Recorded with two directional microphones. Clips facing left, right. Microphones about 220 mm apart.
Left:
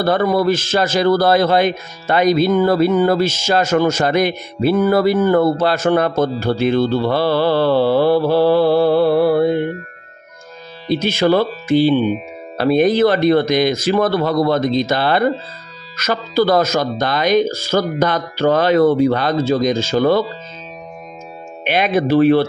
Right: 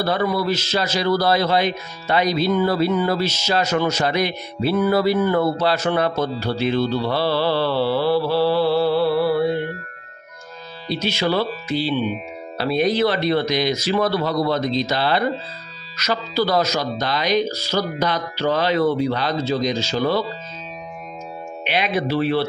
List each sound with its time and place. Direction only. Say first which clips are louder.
0.0 s a man's voice: left 6 dB; 50° left (ahead or behind)
10.9 s a man's voice: left 7 dB; 50° left (ahead or behind)
21.6 s a man's voice: left 6 dB; 50° left (ahead or behind)